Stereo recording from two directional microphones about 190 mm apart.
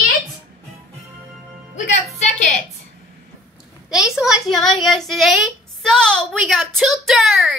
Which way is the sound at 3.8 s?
Centre (ahead or behind).